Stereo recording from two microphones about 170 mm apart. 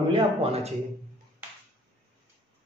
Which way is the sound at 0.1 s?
35° right (ahead or behind).